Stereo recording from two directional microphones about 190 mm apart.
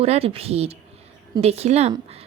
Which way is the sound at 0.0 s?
30° right (ahead or behind).